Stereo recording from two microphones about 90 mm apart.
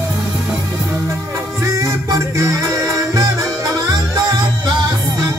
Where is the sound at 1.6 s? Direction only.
35° right (ahead or behind).